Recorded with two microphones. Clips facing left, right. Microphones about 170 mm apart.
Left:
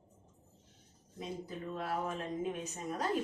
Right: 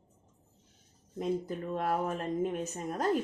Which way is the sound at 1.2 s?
50° right (ahead or behind).